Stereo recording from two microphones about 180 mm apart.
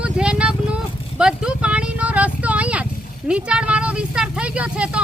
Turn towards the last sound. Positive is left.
turn(degrees=-5)  # may be behind; listen again after turning